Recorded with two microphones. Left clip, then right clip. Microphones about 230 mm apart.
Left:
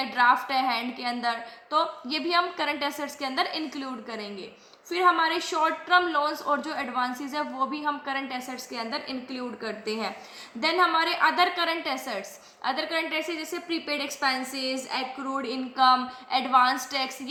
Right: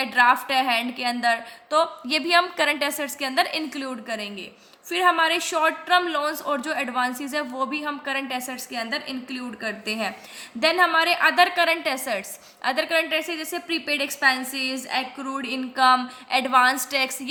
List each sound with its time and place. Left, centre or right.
0.0 s a woman's voice: right